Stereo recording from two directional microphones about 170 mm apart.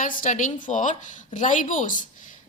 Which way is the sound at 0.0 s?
50° left (ahead or behind).